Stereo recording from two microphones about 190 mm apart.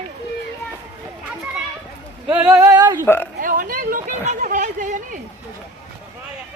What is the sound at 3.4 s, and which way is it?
Speech, 45° right (ahead or behind).